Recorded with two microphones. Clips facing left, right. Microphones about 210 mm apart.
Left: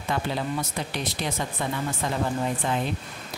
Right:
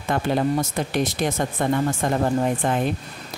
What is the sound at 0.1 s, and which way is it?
Speech, 50° right (ahead or behind).